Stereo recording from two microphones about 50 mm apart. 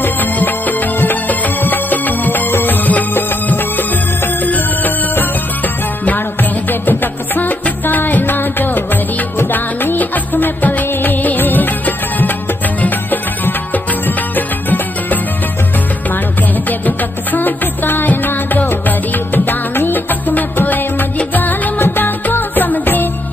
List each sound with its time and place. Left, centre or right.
0.0 s music: left
6.7 s music: left
16.8 s music: left
21.8 s music: left